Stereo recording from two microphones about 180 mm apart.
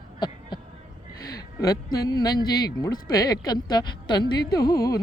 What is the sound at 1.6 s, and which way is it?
Music, 20° left (ahead or behind).